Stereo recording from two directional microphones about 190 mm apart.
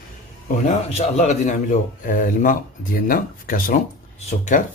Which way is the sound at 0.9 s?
35° left (ahead or behind).